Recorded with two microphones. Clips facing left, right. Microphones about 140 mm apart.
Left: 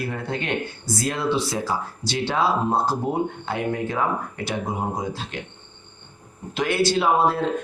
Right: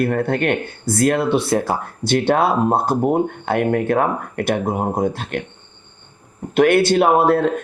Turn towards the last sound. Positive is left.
turn(degrees=-60)  # may be behind; listen again after turning